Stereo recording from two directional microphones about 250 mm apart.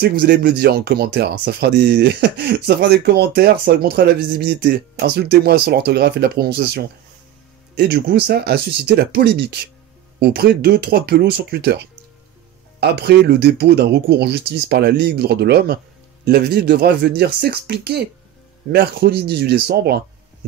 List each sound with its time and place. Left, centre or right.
0.0 s speech: right